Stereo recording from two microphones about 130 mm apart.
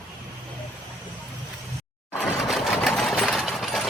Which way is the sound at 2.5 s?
Centre (ahead or behind).